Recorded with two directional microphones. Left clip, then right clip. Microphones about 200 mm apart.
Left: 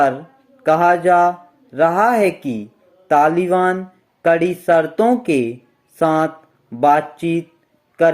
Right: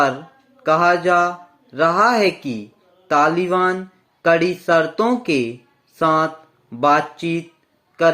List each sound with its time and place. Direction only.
0.6 s speech: 20° left (ahead or behind)